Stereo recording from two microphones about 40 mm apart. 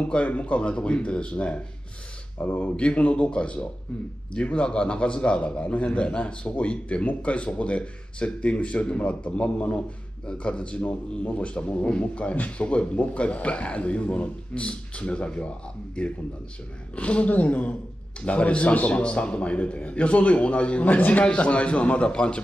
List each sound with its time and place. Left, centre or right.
0.0 s a man's voice: left
2.3 s speech: left
2.7 s a man's voice: left
21.2 s a man's voice: left